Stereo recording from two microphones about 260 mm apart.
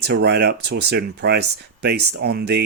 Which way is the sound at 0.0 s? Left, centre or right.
Right.